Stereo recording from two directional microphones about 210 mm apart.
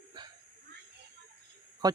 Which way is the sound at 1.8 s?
20° right (ahead or behind).